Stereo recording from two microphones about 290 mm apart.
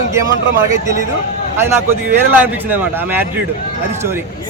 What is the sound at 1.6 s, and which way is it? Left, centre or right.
A man's voice, centre.